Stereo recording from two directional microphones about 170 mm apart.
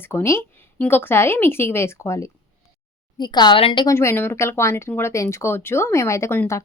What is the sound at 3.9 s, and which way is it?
A woman's voice, 15° left (ahead or behind).